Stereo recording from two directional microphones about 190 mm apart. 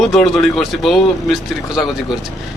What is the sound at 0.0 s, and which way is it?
Speech, centre (ahead or behind).